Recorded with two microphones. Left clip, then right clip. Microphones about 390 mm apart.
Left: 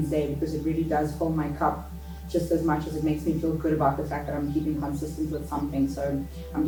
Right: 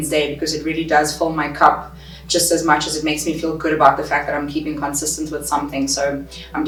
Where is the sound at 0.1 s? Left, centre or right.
Centre.